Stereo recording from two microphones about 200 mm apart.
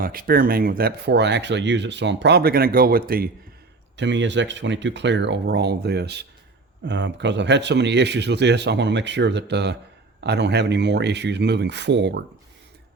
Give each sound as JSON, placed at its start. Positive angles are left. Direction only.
{"t": 0.0, "sound": "speech", "side_deg": -45}
{"t": 3.9, "sound": "speech", "side_deg": -65}